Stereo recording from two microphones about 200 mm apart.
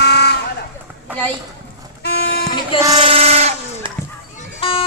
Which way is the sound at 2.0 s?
55° left (ahead or behind).